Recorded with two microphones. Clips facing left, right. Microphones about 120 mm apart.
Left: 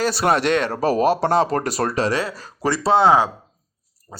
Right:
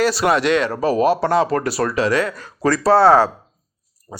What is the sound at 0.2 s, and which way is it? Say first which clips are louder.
Speech: left 1 dB; 35° left (ahead or behind).